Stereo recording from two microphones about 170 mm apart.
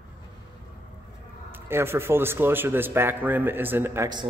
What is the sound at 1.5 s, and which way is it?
A man's voice, 15° right (ahead or behind).